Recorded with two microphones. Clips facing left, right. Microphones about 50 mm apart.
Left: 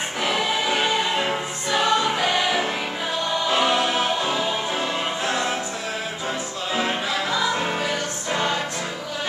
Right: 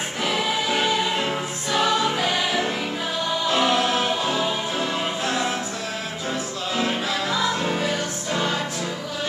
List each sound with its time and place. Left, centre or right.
0.2 s music: centre
6.7 s music: centre
7.5 s music: centre